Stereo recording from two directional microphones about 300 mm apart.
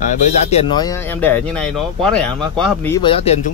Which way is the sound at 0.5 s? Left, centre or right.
Centre.